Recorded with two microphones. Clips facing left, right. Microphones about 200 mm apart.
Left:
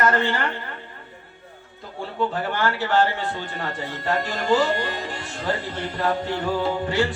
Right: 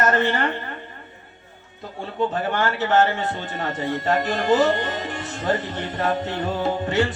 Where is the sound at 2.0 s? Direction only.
20° right (ahead or behind).